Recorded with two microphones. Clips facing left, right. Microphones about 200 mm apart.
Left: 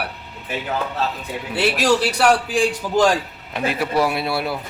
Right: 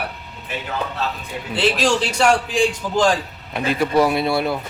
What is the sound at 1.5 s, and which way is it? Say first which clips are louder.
A man's voice: even; 10° left (ahead or behind).